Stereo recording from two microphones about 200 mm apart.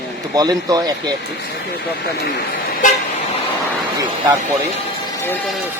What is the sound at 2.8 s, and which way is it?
Vehicle, 40° left (ahead or behind).